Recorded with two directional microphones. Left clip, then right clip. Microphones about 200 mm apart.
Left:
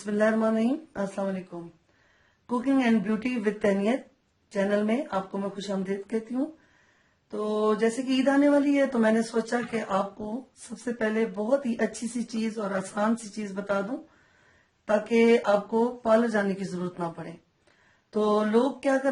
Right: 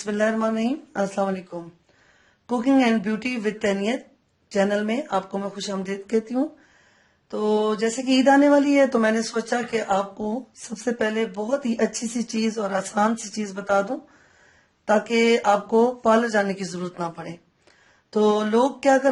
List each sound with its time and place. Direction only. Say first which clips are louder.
0.0 s speech: right 2 dB; 35° right (ahead or behind)
2.5 s speech: right 5 dB; 40° right (ahead or behind)
7.3 s speech: right 4 dB; 40° right (ahead or behind)
10.8 s speech: right 4 dB; 40° right (ahead or behind)
14.8 s speech: right 3 dB; 40° right (ahead or behind)